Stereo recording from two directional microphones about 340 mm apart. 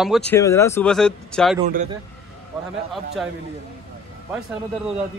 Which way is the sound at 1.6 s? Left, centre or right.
Right.